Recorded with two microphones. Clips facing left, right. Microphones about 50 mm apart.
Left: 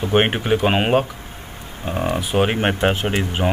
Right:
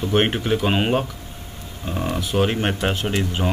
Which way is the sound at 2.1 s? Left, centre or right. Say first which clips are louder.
Left 1 dB; left.